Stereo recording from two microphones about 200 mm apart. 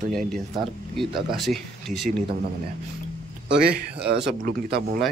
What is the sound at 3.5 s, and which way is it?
Speech, 50° right (ahead or behind).